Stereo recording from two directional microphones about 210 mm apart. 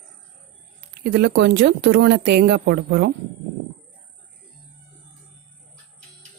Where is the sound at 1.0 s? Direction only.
50° right (ahead or behind).